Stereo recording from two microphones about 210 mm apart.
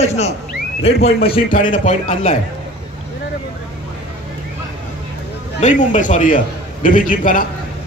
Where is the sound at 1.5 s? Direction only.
40° left (ahead or behind).